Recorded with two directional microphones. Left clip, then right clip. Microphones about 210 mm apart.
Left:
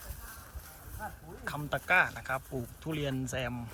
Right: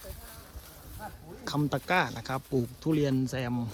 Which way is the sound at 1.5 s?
15° right (ahead or behind).